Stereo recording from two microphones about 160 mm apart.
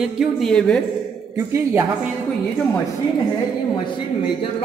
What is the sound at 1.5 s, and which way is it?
Speech, 20° right (ahead or behind).